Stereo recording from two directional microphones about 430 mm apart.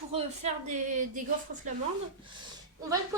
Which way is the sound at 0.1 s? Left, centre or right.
Centre.